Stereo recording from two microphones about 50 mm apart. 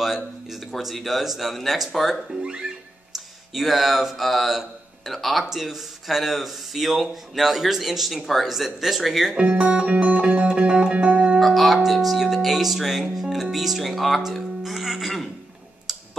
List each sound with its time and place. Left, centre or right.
0.0 s speech: centre
2.4 s music: centre
3.5 s speech: centre
9.4 s music: right
11.3 s speech: centre
15.9 s clicking: centre